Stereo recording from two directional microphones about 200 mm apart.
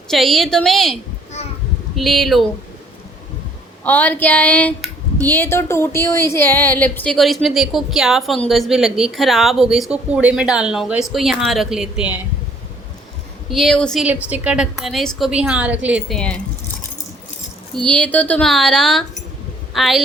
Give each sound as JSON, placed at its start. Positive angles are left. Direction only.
{"t": 0.1, "sound": "speech", "side_deg": 0}
{"t": 2.0, "sound": "speech", "side_deg": 0}
{"t": 3.8, "sound": "speech", "side_deg": 10}
{"t": 13.5, "sound": "speech", "side_deg": 0}
{"t": 17.8, "sound": "speech", "side_deg": 5}